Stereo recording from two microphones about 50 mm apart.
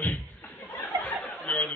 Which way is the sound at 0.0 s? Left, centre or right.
Left.